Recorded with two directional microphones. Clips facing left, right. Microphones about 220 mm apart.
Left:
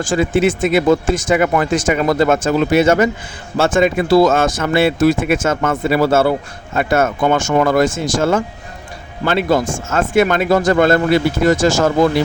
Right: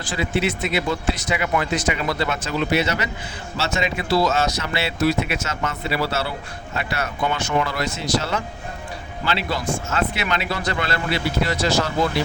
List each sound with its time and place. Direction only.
0.0 s speech: 50° left (ahead or behind)